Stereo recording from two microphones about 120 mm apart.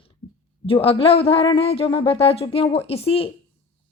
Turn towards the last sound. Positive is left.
turn(degrees=55)  # may be behind; listen again after turning